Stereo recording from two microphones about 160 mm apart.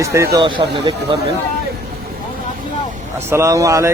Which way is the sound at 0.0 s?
20° right (ahead or behind).